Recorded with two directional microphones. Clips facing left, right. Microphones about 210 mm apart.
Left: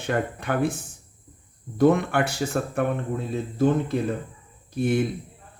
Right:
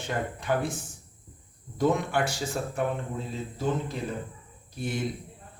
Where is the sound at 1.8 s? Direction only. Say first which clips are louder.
Left 6 dB; 60° left (ahead or behind).